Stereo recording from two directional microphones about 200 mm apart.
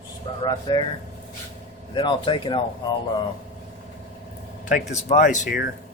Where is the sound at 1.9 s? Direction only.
25° left (ahead or behind).